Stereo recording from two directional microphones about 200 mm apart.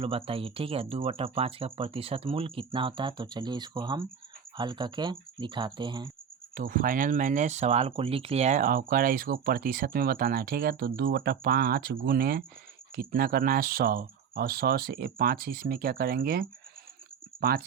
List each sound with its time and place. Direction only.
0.0 s speech: 30° right (ahead or behind)
6.5 s speech: 45° right (ahead or behind)